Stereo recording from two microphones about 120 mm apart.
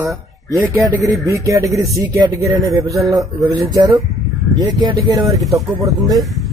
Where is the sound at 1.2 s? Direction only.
25° right (ahead or behind).